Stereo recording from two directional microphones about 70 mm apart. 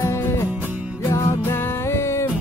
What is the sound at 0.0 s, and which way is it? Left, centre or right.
Music, left.